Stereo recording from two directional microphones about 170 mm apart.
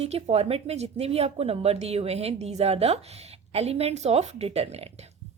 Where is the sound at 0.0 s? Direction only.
40° right (ahead or behind).